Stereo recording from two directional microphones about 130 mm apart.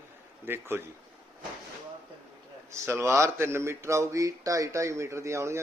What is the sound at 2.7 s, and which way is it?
Speech, 20° right (ahead or behind).